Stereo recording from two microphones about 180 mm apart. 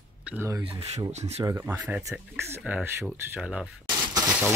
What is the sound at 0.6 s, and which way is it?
Speech, 35° right (ahead or behind).